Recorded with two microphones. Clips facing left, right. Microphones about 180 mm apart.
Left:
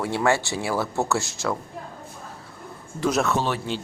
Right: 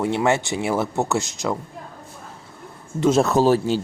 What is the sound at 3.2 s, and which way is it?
Speech, 40° right (ahead or behind).